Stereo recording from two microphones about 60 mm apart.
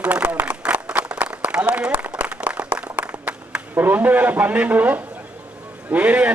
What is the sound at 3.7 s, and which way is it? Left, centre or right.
A man's voice, right.